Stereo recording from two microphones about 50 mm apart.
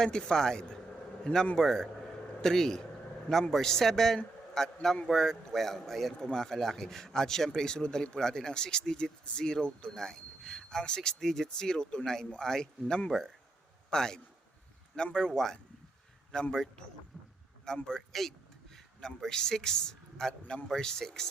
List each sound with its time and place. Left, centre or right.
0.0 s a man's voice: centre